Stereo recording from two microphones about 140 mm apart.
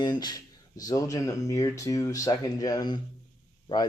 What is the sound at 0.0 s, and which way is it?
Speech, 30° left (ahead or behind).